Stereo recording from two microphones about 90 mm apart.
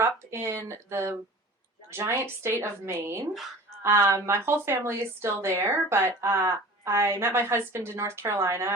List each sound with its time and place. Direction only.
0.0 s a woman's voice: 30° right (ahead or behind)